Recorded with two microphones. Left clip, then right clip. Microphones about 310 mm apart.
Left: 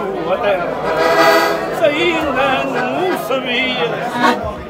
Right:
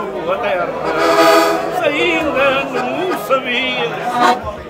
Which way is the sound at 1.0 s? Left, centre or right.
Right.